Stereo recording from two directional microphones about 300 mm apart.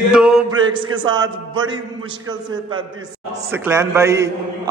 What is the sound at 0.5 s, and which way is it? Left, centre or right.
A man's voice, centre.